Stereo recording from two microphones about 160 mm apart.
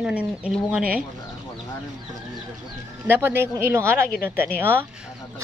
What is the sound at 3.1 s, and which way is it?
Speech, 15° right (ahead or behind).